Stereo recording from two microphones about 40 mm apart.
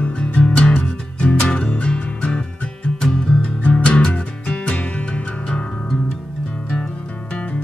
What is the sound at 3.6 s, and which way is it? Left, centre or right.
Music, left.